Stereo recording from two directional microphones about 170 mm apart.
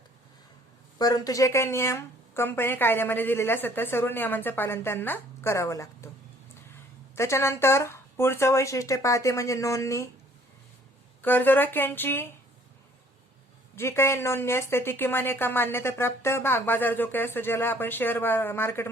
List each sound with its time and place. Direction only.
0.9 s speech: 20° left (ahead or behind)
7.2 s speech: 15° left (ahead or behind)
11.2 s speech: 10° left (ahead or behind)
13.7 s speech: 15° left (ahead or behind)